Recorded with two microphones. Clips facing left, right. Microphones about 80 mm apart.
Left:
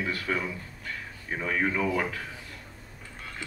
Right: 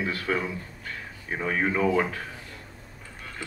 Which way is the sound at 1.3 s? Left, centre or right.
Right.